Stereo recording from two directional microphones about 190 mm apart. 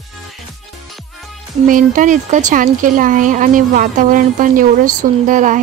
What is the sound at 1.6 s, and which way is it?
Speech, 45° right (ahead or behind).